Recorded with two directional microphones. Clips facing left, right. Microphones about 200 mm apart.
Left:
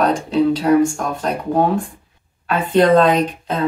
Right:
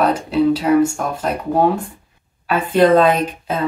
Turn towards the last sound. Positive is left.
turn(degrees=-5)  # may be behind; listen again after turning